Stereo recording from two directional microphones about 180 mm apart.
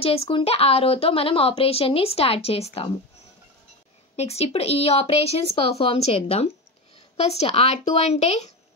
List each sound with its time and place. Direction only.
0.0 s speech: 30° left (ahead or behind)
4.2 s speech: 35° left (ahead or behind)